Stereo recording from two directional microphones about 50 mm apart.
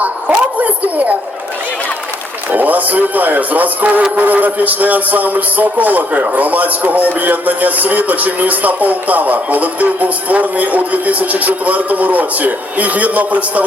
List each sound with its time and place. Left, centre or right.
0.0 s a man's voice: right
2.5 s a man's voice: right